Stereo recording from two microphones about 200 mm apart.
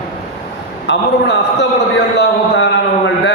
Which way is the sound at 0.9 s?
60° left (ahead or behind).